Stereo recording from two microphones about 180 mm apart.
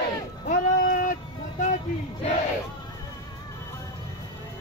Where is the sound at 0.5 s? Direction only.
50° left (ahead or behind).